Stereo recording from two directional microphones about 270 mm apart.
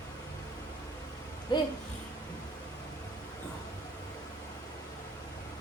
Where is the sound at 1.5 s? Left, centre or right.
Centre.